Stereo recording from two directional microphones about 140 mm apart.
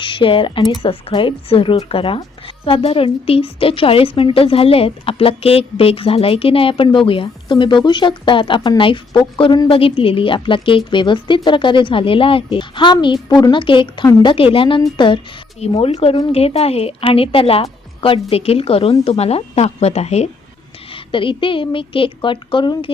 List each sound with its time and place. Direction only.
0.0 s a woman's voice: 35° left (ahead or behind)
20.9 s a woman's voice: 40° left (ahead or behind)